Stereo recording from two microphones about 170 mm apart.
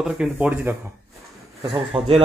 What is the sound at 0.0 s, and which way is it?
Speech, 5° right (ahead or behind).